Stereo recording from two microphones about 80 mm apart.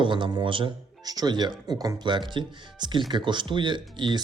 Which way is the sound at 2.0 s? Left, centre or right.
Right.